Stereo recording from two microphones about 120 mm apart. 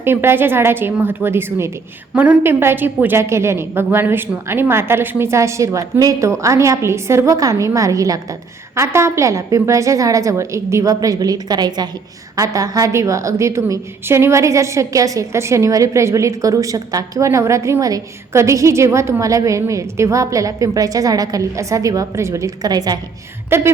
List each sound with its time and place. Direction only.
0.0 s a woman's voice: 20° right (ahead or behind)
23.5 s a woman's voice: 20° right (ahead or behind)